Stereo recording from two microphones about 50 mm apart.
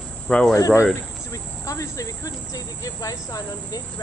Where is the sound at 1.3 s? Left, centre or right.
Left.